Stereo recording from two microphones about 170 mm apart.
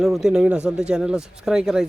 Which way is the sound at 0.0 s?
Centre (ahead or behind).